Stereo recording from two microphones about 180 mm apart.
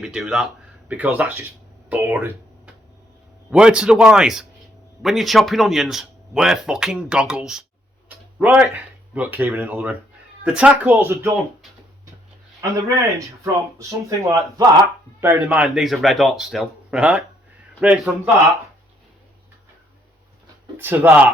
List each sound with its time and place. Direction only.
0.0 s speech: 5° right (ahead or behind)
12.7 s speech: 15° right (ahead or behind)
15.4 s speech: 5° right (ahead or behind)
20.7 s speech: 10° right (ahead or behind)